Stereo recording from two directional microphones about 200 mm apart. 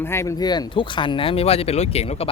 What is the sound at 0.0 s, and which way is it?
Speech, 15° left (ahead or behind).